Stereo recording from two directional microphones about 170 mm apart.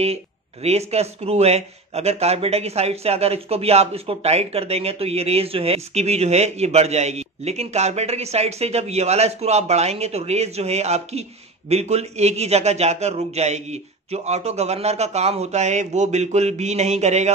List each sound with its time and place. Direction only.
0.0 s speech: 35° right (ahead or behind)